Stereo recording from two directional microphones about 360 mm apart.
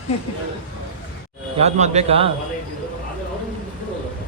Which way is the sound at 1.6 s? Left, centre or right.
Centre.